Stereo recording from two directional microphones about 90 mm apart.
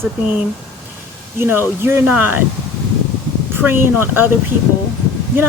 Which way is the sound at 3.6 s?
25° right (ahead or behind).